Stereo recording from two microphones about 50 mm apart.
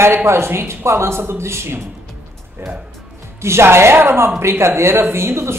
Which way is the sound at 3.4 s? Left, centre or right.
Right.